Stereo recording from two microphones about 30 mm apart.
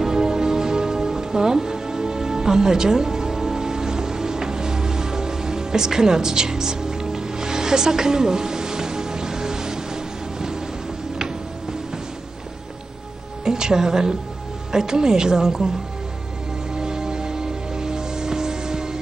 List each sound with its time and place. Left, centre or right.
0.1 s music: right
13.4 s music: right
14.7 s a woman's voice: right
16.7 s music: right